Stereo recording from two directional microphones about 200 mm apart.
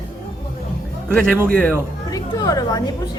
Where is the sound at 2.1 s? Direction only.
20° left (ahead or behind).